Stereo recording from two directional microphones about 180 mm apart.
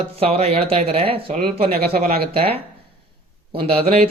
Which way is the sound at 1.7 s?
60° right (ahead or behind).